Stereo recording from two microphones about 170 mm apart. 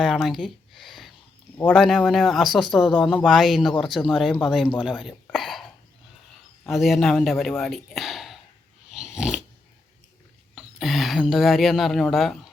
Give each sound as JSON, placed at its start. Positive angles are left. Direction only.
{"t": 0.0, "sound": "a sound", "side_deg": 0}
{"t": 1.7, "sound": "speech", "side_deg": 0}
{"t": 6.7, "sound": "speech", "side_deg": 0}
{"t": 8.9, "sound": "dog", "side_deg": -5}
{"t": 10.5, "sound": "speech", "side_deg": 0}